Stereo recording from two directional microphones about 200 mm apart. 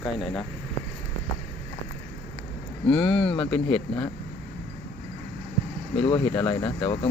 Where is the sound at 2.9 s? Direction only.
5° left (ahead or behind).